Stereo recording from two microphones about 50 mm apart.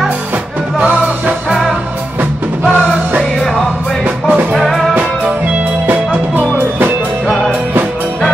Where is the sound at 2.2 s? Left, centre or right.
Right.